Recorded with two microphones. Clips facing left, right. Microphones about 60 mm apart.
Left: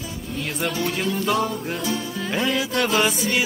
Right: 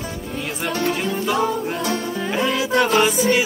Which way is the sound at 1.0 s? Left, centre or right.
Centre.